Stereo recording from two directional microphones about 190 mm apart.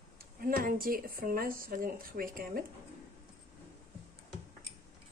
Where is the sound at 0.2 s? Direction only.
50° right (ahead or behind).